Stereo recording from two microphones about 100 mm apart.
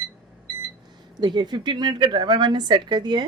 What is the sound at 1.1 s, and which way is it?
A woman's voice, 45° right (ahead or behind).